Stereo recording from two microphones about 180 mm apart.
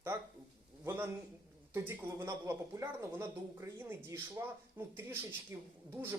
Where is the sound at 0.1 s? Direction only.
15° right (ahead or behind).